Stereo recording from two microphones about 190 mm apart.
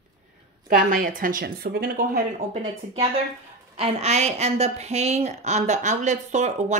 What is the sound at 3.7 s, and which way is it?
A woman's voice, 35° right (ahead or behind).